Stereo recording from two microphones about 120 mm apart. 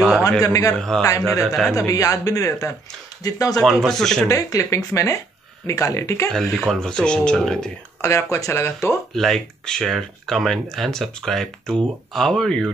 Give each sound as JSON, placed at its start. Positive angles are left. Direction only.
{"t": 0.4, "sound": "a man's voice", "side_deg": 30}
{"t": 0.7, "sound": "speech", "side_deg": 5}
{"t": 1.8, "sound": "a man's voice", "side_deg": 30}
{"t": 3.8, "sound": "speech", "side_deg": 5}
{"t": 4.3, "sound": "a man's voice", "side_deg": 30}
{"t": 6.2, "sound": "speech", "side_deg": 5}
{"t": 8.0, "sound": "a man's voice", "side_deg": 25}
{"t": 9.1, "sound": "speech", "side_deg": 0}